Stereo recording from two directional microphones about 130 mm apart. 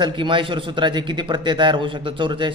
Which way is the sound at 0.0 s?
40° right (ahead or behind).